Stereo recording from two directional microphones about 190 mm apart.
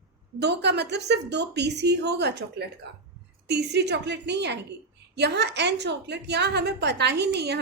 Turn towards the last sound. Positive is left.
turn(degrees=-60)  # may be behind; listen again after turning